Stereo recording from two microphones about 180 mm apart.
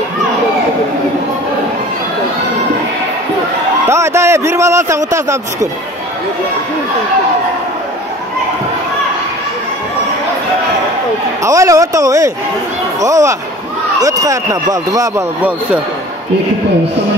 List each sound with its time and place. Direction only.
3.9 s a man's voice: 15° right (ahead or behind)
11.4 s a man's voice: 20° right (ahead or behind)